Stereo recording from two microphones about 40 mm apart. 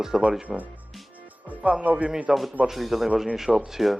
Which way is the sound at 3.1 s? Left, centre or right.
Centre.